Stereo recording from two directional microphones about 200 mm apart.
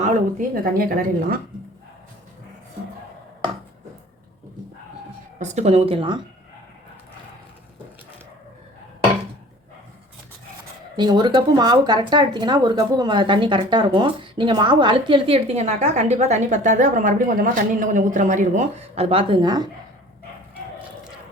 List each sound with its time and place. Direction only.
0.0 s a woman's voice: 40° right (ahead or behind)
5.4 s speech: 35° right (ahead or behind)
10.9 s speech: 20° right (ahead or behind)